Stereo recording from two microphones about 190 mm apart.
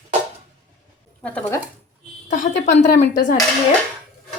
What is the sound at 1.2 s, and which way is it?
Speech, 10° left (ahead or behind).